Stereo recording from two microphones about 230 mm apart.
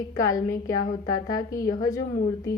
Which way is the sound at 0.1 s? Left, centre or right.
Centre.